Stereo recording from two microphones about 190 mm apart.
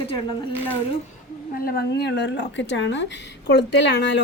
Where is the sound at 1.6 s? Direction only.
55° left (ahead or behind).